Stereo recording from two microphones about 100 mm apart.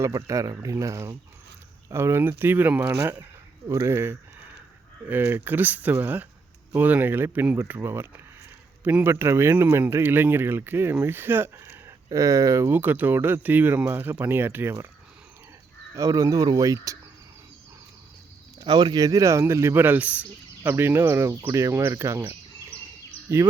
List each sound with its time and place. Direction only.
0.0 s a man's voice: 35° right (ahead or behind)
16.0 s speech: 30° right (ahead or behind)
18.6 s a man's voice: 45° right (ahead or behind); by 22.2 s 30° right (ahead or behind)
23.3 s a man's voice: 30° right (ahead or behind)